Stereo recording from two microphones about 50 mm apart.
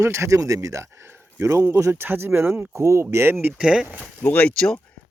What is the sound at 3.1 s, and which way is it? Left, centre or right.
Speech, right.